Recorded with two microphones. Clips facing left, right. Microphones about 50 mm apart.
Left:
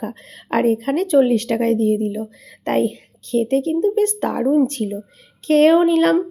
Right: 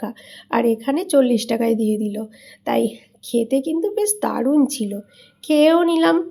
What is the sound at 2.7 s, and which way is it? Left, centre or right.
A woman's voice, left.